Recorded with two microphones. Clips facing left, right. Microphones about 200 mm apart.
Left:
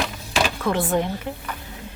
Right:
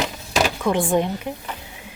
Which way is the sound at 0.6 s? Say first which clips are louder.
Right 2 dB; 15° right (ahead or behind).